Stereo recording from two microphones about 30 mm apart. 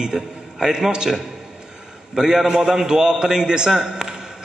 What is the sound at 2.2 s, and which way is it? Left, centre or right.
A man's voice, centre.